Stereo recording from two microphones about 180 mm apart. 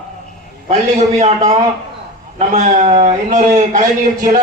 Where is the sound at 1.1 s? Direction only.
40° right (ahead or behind).